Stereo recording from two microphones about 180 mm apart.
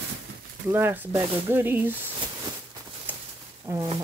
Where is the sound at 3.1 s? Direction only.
10° right (ahead or behind).